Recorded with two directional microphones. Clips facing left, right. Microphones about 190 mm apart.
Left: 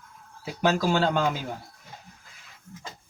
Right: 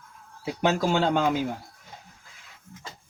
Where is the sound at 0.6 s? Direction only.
20° right (ahead or behind).